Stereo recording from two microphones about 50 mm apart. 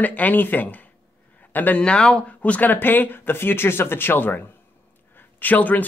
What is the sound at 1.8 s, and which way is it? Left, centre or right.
A man's voice, centre.